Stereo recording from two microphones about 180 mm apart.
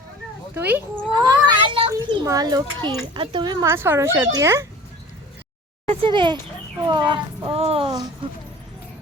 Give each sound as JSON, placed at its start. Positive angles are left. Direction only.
{"t": 0.5, "sound": "speech", "side_deg": -10}
{"t": 1.1, "sound": "speech", "side_deg": -25}
{"t": 1.5, "sound": "child singing", "side_deg": -30}
{"t": 1.9, "sound": "a child's voice", "side_deg": -20}
{"t": 5.9, "sound": "speech", "side_deg": -30}